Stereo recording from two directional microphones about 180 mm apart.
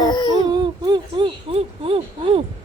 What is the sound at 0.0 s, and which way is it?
Baby cry, 25° left (ahead or behind).